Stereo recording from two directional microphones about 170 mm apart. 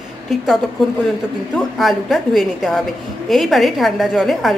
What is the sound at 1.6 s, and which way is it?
A woman's voice, centre (ahead or behind).